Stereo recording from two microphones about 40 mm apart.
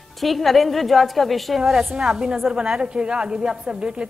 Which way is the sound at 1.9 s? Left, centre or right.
Centre.